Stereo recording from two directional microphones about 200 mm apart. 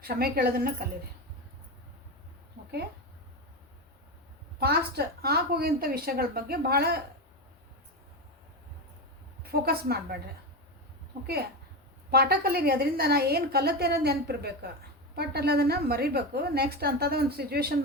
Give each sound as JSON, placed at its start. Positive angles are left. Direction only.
{"t": 0.0, "sound": "a woman's voice", "side_deg": -50}
{"t": 4.6, "sound": "a woman's voice", "side_deg": -55}
{"t": 9.4, "sound": "a woman's voice", "side_deg": -50}
{"t": 12.1, "sound": "a woman's voice", "side_deg": -50}